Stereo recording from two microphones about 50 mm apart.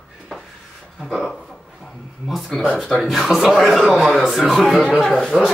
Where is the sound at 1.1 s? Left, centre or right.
Centre.